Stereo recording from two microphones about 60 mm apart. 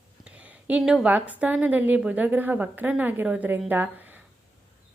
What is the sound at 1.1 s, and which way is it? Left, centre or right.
A woman's voice, right.